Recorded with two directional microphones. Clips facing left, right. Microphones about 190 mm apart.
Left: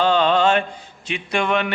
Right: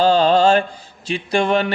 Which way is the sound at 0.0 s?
35° right (ahead or behind).